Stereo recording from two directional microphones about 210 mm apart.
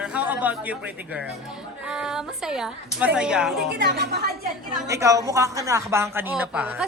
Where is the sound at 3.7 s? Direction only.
50° right (ahead or behind).